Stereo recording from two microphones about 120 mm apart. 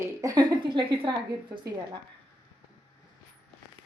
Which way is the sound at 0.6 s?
40° right (ahead or behind).